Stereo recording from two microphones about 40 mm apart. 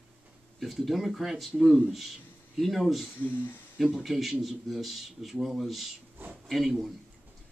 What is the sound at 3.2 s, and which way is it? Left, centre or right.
Speech, left.